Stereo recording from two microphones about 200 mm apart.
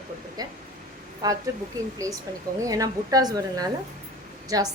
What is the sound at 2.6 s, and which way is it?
A woman's voice, 15° right (ahead or behind).